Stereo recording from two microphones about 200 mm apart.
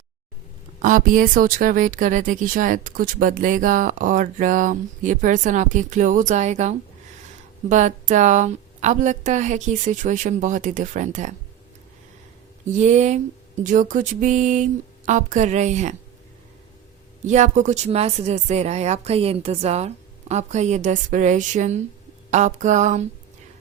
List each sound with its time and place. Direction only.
0.8 s speech: 40° right (ahead or behind)
12.7 s speech: 35° right (ahead or behind)
17.2 s speech: 35° right (ahead or behind)